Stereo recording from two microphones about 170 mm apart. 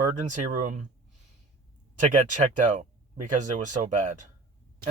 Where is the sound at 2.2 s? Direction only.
45° right (ahead or behind).